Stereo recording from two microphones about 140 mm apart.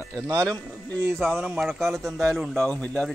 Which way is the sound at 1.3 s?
5° right (ahead or behind).